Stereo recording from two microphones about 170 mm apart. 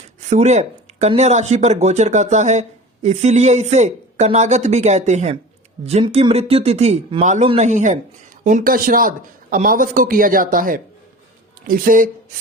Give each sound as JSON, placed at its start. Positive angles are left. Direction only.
{"t": 0.2, "sound": "a man's voice", "side_deg": -40}